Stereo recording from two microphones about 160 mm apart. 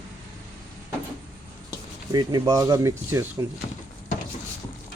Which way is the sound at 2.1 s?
25° right (ahead or behind).